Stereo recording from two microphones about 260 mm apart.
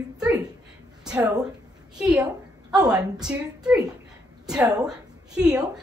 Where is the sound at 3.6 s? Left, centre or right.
Centre.